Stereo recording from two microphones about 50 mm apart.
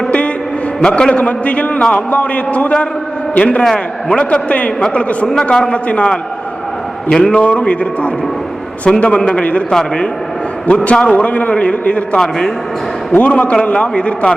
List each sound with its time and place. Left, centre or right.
0.8 s a man's voice: centre